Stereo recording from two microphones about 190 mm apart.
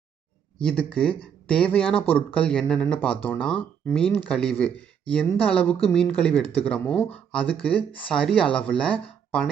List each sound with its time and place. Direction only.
0.6 s speech: 5° left (ahead or behind)